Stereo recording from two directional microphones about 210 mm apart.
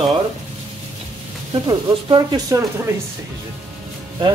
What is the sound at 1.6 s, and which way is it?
Speech, 20° right (ahead or behind).